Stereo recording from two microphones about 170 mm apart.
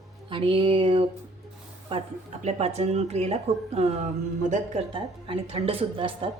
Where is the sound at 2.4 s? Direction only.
40° right (ahead or behind).